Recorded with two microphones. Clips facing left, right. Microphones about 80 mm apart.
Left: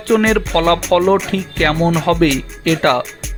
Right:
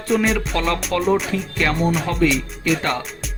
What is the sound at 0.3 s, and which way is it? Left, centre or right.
Speech, left.